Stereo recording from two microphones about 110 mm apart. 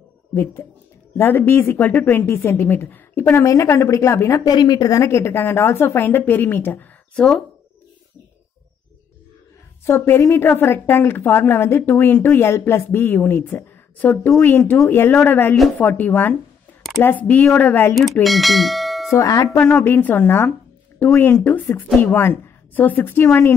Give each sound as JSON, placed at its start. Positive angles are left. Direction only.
{"t": 0.3, "sound": "a woman's voice", "side_deg": 20}
{"t": 4.6, "sound": "a woman's voice", "side_deg": 35}
{"t": 7.2, "sound": "speech", "side_deg": 5}
{"t": 9.8, "sound": "a woman's voice", "side_deg": 25}
{"t": 18.2, "sound": "bell", "side_deg": 0}
{"t": 19.1, "sound": "speech", "side_deg": 30}
{"t": 19.5, "sound": "a woman's voice", "side_deg": 10}